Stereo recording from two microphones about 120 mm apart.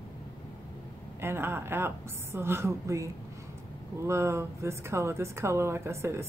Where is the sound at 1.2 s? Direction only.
20° right (ahead or behind).